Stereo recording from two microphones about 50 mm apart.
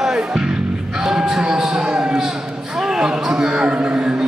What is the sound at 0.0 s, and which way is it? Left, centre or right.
Music, centre.